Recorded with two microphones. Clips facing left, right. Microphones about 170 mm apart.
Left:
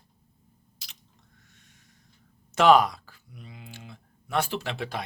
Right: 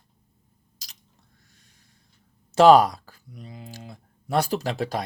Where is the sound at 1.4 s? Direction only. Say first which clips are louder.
Left 1 dB; 35° right (ahead or behind).